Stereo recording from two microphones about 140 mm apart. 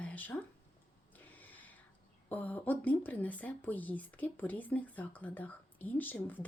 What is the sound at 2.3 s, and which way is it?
Speech, 10° left (ahead or behind).